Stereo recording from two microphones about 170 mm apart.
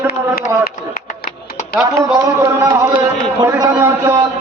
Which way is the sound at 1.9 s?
20° right (ahead or behind).